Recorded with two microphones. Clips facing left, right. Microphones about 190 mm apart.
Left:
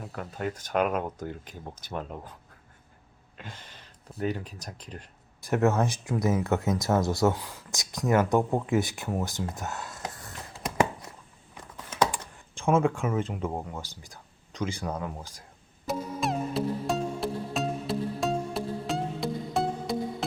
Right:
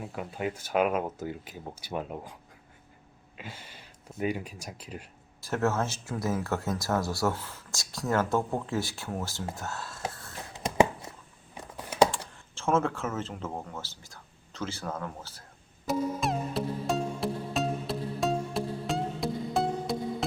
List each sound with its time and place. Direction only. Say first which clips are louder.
0.0 s speech: even; 10° right (ahead or behind)
3.3 s a sound: right 1 dB; 10° right (ahead or behind)
4.2 s speech: even; 10° right (ahead or behind)
5.4 s speech: left 4 dB; 15° left (ahead or behind)
10.5 s a sound: right 3 dB; 20° right (ahead or behind)
12.5 s speech: left 3 dB; 15° left (ahead or behind)
15.9 s music: right 1 dB; centre (ahead or behind)